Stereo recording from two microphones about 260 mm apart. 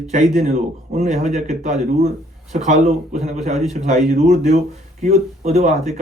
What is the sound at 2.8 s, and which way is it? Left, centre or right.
A man's voice, right.